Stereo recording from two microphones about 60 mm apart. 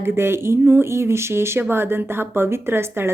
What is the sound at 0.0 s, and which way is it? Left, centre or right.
Speech, right.